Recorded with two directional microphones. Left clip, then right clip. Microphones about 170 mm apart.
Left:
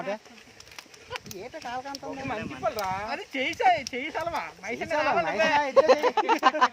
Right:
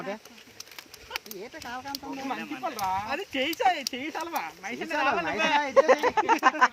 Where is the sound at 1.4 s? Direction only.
25° left (ahead or behind).